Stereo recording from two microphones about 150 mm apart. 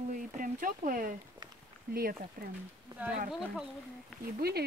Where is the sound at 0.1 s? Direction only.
65° right (ahead or behind).